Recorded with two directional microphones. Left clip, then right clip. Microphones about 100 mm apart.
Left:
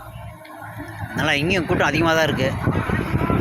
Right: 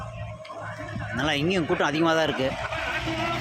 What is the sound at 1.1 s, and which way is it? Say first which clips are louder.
Speech: left 5 dB; 15° left (ahead or behind).